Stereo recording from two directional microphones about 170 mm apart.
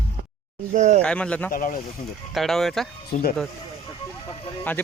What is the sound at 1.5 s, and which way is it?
Speech, 55° left (ahead or behind).